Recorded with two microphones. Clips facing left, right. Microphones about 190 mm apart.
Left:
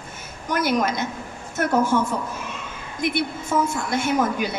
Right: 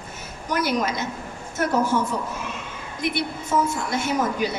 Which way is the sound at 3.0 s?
50° left (ahead or behind).